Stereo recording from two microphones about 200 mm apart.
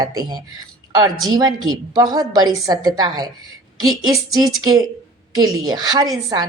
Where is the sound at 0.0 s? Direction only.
20° right (ahead or behind).